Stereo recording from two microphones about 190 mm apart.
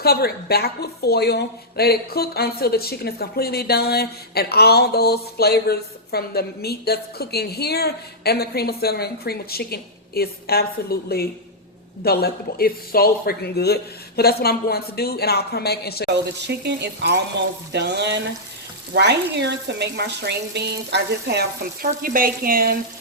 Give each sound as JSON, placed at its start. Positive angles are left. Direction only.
{"t": 0.0, "sound": "a woman's voice", "side_deg": 55}
{"t": 16.0, "sound": "speech", "side_deg": -60}